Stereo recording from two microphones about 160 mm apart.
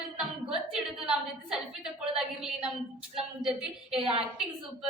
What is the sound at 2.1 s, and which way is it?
A woman's voice, 5° right (ahead or behind).